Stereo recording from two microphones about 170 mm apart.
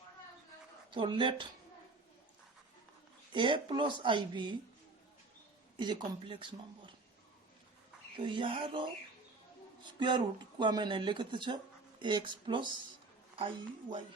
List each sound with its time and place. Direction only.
0.9 s speech: 30° right (ahead or behind)
3.3 s speech: 30° right (ahead or behind)
5.7 s speech: 25° right (ahead or behind)
8.1 s speech: 30° right (ahead or behind)
10.0 s speech: 30° right (ahead or behind)